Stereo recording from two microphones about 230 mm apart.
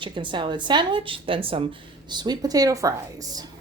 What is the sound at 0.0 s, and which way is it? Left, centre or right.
A woman's voice, right.